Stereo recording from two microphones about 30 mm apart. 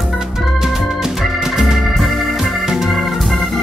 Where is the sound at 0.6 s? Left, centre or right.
Centre.